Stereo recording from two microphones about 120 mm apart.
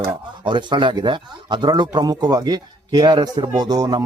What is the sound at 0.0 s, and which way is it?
Speech, 40° right (ahead or behind).